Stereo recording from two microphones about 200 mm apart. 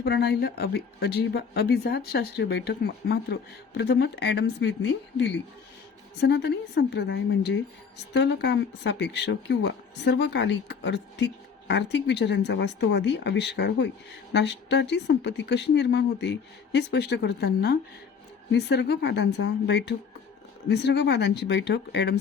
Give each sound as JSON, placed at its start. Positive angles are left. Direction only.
{"t": 0.0, "sound": "a woman's voice", "side_deg": 55}